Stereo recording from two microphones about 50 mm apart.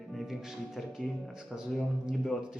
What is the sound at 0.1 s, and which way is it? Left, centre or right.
Speech, centre.